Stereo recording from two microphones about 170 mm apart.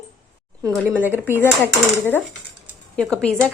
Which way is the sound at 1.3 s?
15° left (ahead or behind).